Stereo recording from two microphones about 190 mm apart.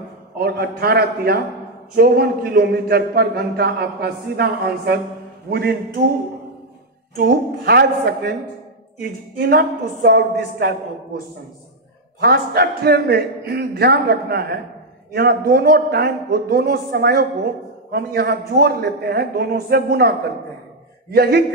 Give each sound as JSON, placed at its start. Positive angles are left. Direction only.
{"t": 0.4, "sound": "a man's voice", "side_deg": -55}
{"t": 7.2, "sound": "a man's voice", "side_deg": -55}
{"t": 12.2, "sound": "a man's voice", "side_deg": -55}